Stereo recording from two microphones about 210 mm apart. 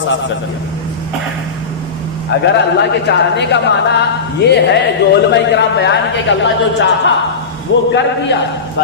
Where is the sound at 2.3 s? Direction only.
55° left (ahead or behind).